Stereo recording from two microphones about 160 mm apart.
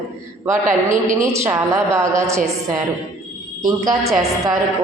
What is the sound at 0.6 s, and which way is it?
Speech, 55° right (ahead or behind).